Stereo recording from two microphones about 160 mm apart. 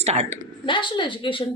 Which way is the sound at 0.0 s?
40° right (ahead or behind).